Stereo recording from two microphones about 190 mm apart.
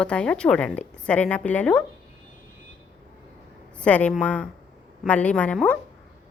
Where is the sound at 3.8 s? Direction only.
5° left (ahead or behind).